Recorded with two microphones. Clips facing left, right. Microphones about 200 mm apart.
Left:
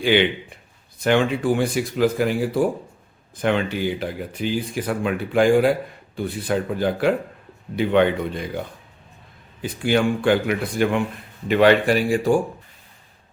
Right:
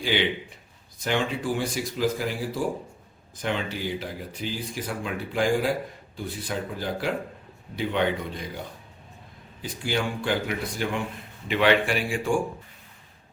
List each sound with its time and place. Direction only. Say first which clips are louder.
0.0 s speech: left 7 dB; 60° left (ahead or behind)
9.6 s speech: left 8 dB; 60° left (ahead or behind)
11.4 s speech: left 6 dB; 45° left (ahead or behind)